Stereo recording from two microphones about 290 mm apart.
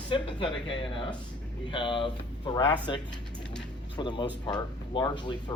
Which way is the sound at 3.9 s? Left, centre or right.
Centre.